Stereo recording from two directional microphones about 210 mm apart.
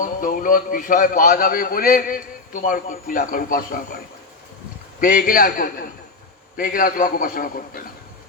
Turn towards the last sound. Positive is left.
turn(degrees=45)  # may be behind; listen again after turning